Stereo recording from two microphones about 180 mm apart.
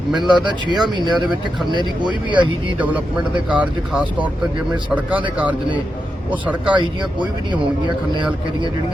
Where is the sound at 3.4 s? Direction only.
5° right (ahead or behind).